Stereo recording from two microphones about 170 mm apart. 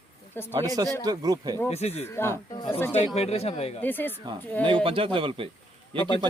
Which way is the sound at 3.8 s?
10° left (ahead or behind).